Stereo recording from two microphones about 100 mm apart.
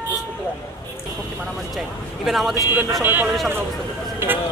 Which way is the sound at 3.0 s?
20° right (ahead or behind).